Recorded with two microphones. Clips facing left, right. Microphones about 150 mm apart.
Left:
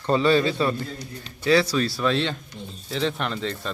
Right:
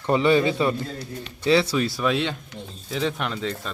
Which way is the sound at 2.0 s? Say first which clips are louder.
Even; 10° right (ahead or behind).